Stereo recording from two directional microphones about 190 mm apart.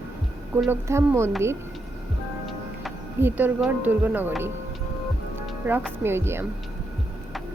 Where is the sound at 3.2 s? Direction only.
10° right (ahead or behind).